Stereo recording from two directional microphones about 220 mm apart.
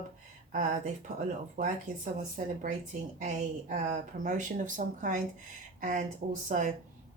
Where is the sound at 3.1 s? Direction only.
35° right (ahead or behind).